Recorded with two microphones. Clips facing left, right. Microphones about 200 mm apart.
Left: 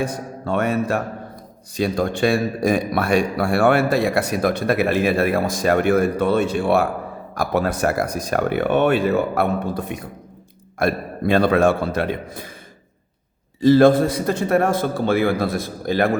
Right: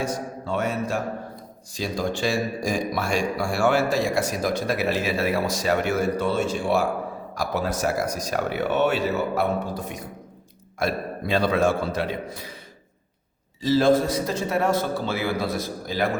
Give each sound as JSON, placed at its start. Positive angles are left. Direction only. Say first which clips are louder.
{"t": 0.0, "sound": "mantra", "louder": "left 3 dB", "side_deg": 60}
{"t": 1.7, "sound": "a man's voice", "louder": "left 6 dB", "side_deg": 60}
{"t": 13.6, "sound": "a man's voice", "louder": "left 6 dB", "side_deg": 55}